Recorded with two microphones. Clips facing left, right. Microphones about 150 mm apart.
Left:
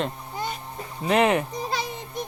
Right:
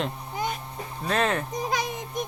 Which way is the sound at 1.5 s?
15° right (ahead or behind).